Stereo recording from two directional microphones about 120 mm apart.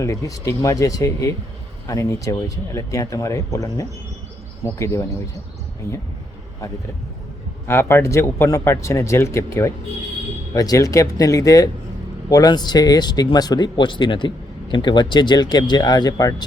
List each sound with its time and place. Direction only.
0.0 s speech: 25° left (ahead or behind)
7.7 s speech: 20° left (ahead or behind)